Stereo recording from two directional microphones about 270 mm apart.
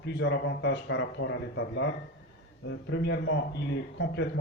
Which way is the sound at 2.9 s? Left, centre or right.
Left.